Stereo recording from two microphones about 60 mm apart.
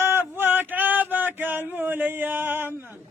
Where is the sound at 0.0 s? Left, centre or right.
Right.